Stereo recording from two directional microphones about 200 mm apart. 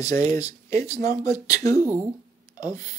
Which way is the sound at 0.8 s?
35° right (ahead or behind).